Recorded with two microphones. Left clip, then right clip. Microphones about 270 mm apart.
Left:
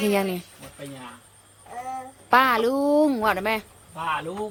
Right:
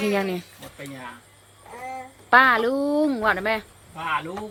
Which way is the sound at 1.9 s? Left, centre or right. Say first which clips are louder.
Right 2 dB; centre.